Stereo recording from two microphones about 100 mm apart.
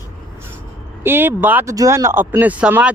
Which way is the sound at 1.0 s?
20° right (ahead or behind).